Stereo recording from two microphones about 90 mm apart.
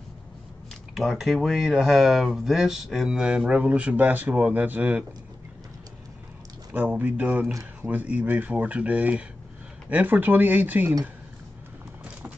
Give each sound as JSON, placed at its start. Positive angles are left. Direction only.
{"t": 0.9, "sound": "speech", "side_deg": -5}
{"t": 6.7, "sound": "speech", "side_deg": -20}